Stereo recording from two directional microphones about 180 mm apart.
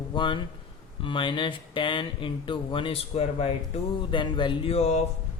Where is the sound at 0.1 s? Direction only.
25° left (ahead or behind).